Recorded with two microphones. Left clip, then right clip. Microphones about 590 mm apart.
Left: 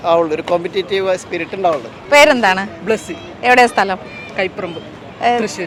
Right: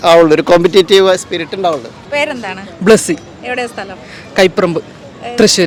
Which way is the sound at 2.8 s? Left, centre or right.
Right.